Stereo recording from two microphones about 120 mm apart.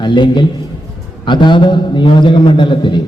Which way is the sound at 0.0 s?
40° left (ahead or behind).